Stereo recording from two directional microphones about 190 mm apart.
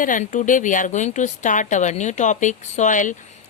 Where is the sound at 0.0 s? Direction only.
45° left (ahead or behind).